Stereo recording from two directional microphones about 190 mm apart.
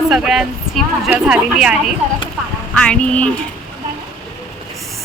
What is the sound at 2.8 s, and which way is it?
Speech, 5° left (ahead or behind).